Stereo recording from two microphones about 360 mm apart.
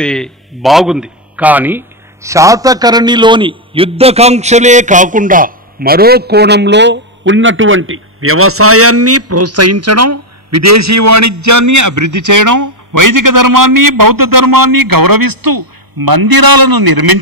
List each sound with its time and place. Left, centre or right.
0.0 s a man's voice: centre; by 17.2 s right